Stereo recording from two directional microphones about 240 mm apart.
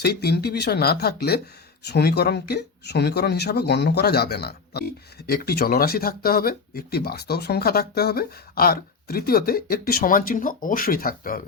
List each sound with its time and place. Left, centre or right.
0.0 s speech: left